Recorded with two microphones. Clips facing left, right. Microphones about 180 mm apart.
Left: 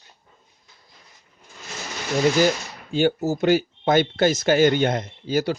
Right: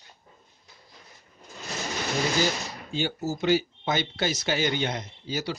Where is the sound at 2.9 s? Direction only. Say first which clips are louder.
Left 9 dB; 55° left (ahead or behind).